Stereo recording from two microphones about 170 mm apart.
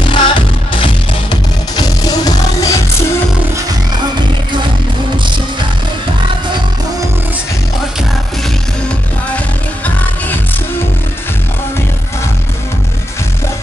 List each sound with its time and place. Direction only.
0.1 s music: 30° left (ahead or behind)